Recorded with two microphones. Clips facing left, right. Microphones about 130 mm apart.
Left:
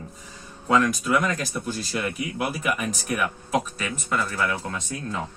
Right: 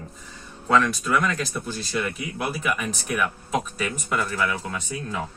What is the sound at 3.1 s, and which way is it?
Speech, centre (ahead or behind).